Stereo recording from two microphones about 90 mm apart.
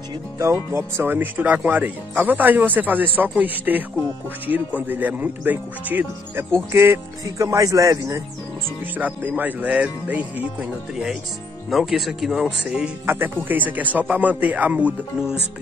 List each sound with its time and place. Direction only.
0.4 s speech: 30° right (ahead or behind)
7.3 s a man's voice: 35° right (ahead or behind)
8.9 s speech: 20° right (ahead or behind)
10.6 s speech: 5° right (ahead or behind)
13.0 s speech: 25° right (ahead or behind)